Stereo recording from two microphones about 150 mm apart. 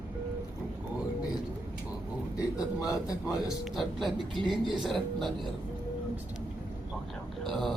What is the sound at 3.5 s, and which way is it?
Speech, centre (ahead or behind).